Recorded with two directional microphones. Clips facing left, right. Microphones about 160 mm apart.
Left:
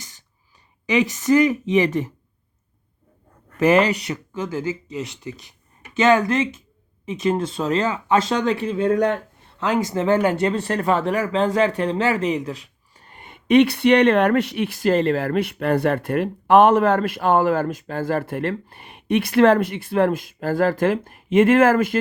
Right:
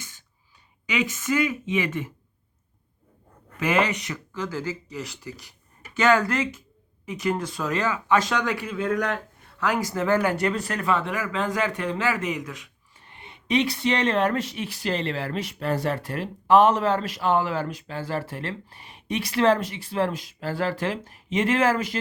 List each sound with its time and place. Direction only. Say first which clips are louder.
1.0 s speech: left 8 dB; 40° left (ahead or behind)
3.6 s speech: left 7 dB; 35° left (ahead or behind); by 21.9 s 55° left (ahead or behind)